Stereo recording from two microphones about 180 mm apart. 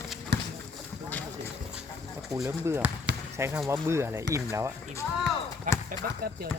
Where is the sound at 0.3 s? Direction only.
70° right (ahead or behind).